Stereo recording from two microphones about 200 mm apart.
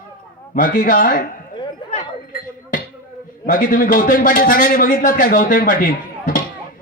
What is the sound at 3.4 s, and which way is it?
A man's voice, 45° left (ahead or behind).